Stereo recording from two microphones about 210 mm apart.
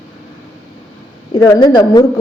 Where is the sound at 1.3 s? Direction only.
15° left (ahead or behind).